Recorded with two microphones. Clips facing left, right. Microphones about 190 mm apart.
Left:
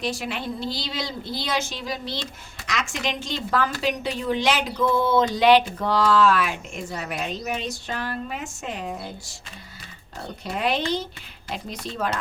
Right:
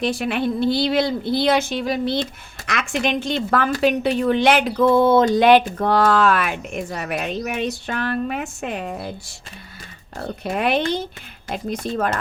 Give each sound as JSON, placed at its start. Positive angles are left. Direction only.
{"t": 0.0, "sound": "a woman's voice", "side_deg": -60}
{"t": 10.4, "sound": "a woman's voice", "side_deg": -60}